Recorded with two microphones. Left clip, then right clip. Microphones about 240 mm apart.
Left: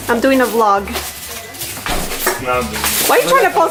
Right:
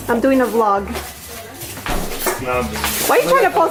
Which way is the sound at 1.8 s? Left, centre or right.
Centre.